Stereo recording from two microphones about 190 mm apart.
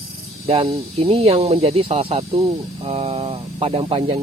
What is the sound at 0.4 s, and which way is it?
Speech, 30° right (ahead or behind).